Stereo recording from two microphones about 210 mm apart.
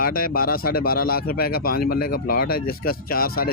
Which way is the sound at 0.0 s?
45° left (ahead or behind).